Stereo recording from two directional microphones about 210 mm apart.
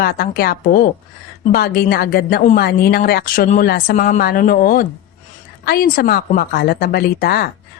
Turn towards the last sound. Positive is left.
turn(degrees=45)  # may be behind; listen again after turning